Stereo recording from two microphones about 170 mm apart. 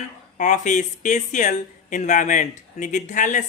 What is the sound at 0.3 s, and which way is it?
Speech, 45° left (ahead or behind).